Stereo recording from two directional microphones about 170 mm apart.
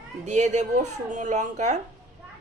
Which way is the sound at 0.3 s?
45° right (ahead or behind).